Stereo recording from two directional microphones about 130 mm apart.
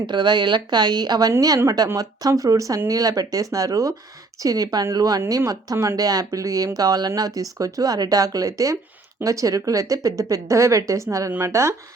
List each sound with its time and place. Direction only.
0.0 s speech: 35° right (ahead or behind)